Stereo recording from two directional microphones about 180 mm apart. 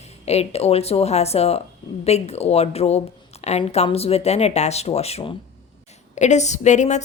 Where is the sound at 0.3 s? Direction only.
35° left (ahead or behind).